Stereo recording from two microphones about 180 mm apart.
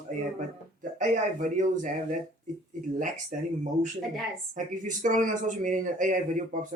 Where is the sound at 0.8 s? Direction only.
45° right (ahead or behind).